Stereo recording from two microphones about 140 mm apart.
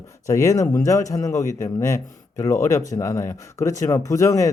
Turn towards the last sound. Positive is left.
turn(degrees=20)  # may be behind; listen again after turning